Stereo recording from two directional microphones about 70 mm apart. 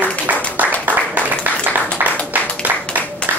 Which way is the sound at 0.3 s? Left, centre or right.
Right.